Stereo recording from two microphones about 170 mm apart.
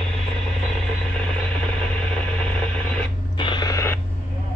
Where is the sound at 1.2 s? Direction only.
5° left (ahead or behind).